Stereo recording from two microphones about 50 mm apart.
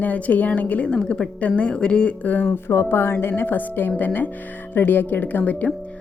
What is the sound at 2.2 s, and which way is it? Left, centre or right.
Speech, left.